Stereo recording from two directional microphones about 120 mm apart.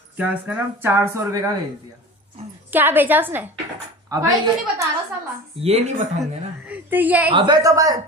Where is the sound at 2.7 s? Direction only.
15° right (ahead or behind).